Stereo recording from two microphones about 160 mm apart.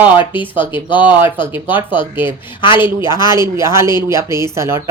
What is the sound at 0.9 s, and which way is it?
A woman's voice, 10° right (ahead or behind).